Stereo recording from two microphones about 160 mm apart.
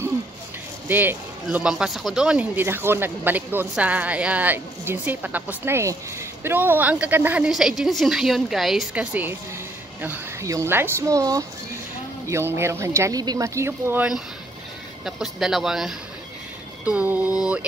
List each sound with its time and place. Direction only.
0.8 s speech: 10° right (ahead or behind)